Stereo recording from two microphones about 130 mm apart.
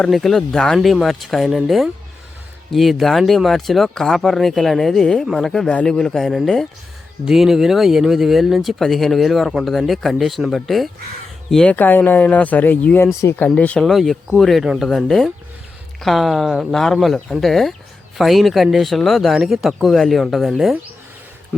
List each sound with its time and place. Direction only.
0.0 s speech: centre (ahead or behind)